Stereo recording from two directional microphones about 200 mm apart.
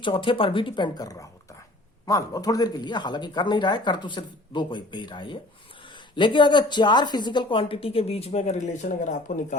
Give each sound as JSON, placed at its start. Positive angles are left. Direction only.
{"t": 0.0, "sound": "speech", "side_deg": 25}